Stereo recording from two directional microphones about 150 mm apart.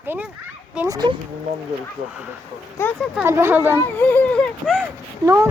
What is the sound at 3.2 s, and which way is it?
Speech, 15° right (ahead or behind).